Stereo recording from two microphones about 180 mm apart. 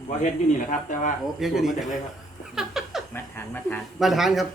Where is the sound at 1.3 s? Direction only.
Centre (ahead or behind).